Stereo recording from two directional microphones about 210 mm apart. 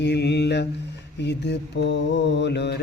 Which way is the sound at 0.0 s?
55° left (ahead or behind).